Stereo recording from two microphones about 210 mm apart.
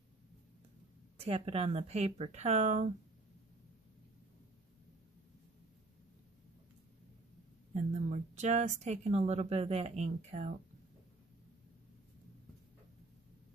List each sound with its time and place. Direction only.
1.2 s speech: 30° right (ahead or behind)
7.7 s speech: 35° right (ahead or behind)